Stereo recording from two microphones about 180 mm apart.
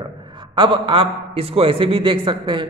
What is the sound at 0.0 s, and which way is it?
A man's voice, 25° right (ahead or behind).